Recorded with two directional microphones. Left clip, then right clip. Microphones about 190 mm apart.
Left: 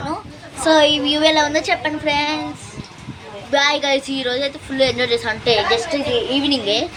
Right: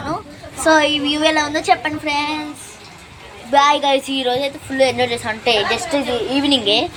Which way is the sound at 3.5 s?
5° right (ahead or behind).